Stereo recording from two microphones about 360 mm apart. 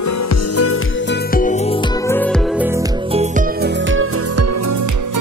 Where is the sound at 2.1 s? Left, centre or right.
Centre.